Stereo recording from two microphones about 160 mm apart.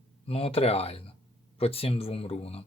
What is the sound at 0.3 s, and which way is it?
Speech, 35° left (ahead or behind).